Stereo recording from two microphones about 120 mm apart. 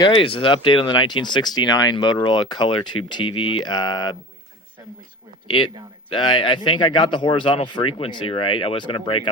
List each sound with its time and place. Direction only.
0.0 s speech: 50° left (ahead or behind)
6.1 s speech: 40° left (ahead or behind)